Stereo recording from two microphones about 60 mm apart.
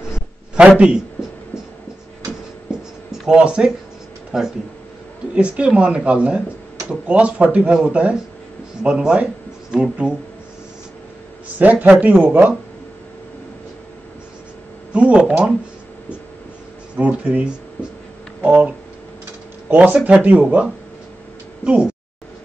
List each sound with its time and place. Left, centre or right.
0.6 s speech: centre
3.1 s speech: centre
11.5 s speech: right
14.9 s speech: centre
16.9 s speech: right
19.7 s speech: right